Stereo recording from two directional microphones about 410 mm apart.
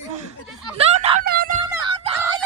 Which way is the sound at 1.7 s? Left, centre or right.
Centre.